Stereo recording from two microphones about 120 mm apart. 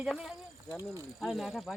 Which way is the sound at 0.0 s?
5° right (ahead or behind).